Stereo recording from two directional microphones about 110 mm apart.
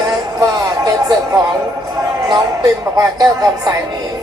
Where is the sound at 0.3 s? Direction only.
35° right (ahead or behind).